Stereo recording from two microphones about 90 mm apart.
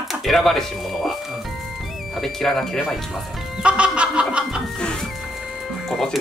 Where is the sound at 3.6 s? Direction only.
10° right (ahead or behind).